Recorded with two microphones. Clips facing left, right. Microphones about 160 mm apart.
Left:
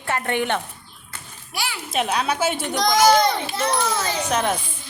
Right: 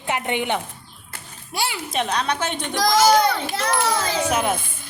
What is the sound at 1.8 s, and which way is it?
A woman's voice, 5° left (ahead or behind).